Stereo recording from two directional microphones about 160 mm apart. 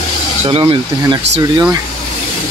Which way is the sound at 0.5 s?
35° right (ahead or behind).